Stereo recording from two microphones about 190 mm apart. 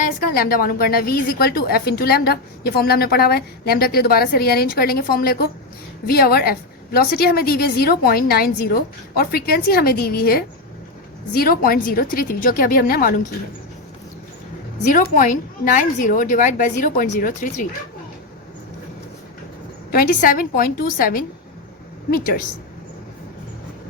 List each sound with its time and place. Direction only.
0.0 s a woman's voice: 50° left (ahead or behind)
14.9 s a woman's voice: 45° left (ahead or behind)
19.9 s a woman's voice: 50° left (ahead or behind)